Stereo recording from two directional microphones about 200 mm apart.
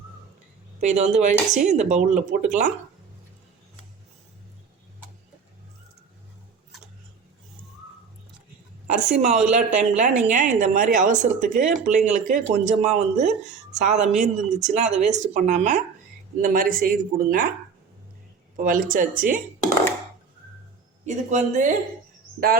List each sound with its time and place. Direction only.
0.8 s speech: 35° right (ahead or behind)
9.0 s speech: 35° right (ahead or behind)
18.5 s speech: 40° right (ahead or behind)
21.0 s speech: 35° right (ahead or behind)